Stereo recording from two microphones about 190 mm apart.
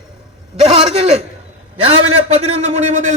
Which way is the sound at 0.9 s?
30° right (ahead or behind).